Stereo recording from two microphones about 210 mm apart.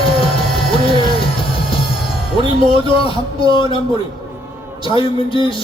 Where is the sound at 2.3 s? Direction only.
25° left (ahead or behind).